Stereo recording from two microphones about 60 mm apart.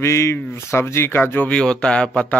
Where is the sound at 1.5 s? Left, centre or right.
Centre.